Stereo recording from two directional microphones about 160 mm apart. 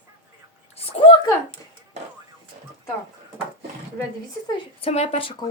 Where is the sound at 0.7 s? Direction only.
35° left (ahead or behind).